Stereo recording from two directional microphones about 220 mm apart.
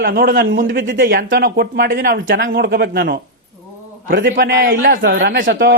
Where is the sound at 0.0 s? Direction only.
40° right (ahead or behind).